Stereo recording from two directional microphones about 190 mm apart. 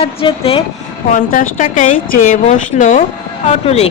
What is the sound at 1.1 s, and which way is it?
A woman's voice, 45° left (ahead or behind).